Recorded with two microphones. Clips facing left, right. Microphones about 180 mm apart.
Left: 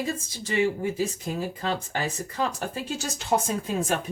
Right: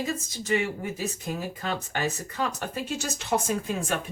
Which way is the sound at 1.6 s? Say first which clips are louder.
Left 1 dB; 30° left (ahead or behind).